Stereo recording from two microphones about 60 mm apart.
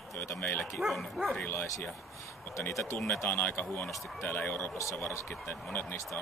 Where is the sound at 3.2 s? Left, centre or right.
Left.